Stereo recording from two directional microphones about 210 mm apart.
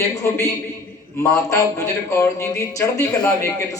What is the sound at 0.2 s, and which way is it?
A man's voice, 10° left (ahead or behind).